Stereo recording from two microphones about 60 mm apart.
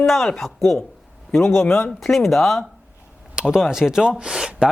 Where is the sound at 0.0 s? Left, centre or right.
Centre.